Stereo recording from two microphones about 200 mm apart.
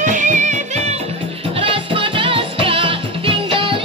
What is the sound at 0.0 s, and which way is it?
Music, 40° right (ahead or behind).